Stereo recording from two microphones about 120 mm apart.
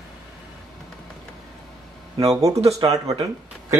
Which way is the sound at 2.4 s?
25° right (ahead or behind).